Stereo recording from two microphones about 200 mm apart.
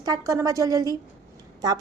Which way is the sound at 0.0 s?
15° right (ahead or behind).